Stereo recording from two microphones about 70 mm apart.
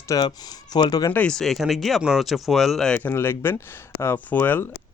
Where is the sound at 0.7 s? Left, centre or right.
Left.